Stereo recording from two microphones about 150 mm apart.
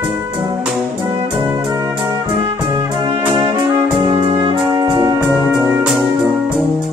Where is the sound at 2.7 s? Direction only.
30° right (ahead or behind).